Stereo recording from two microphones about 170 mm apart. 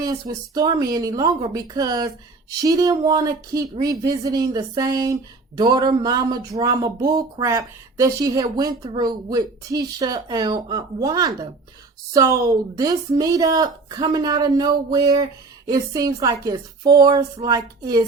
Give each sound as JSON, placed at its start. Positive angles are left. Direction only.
{"t": 0.0, "sound": "speech", "side_deg": -20}